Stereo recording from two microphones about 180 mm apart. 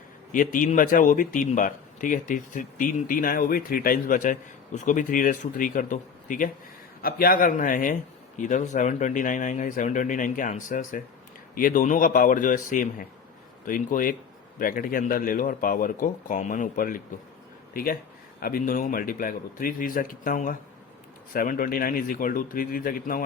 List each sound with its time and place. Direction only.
0.3 s speech: 45° left (ahead or behind)